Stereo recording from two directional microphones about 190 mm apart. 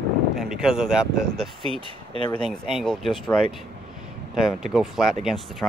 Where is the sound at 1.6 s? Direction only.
30° right (ahead or behind).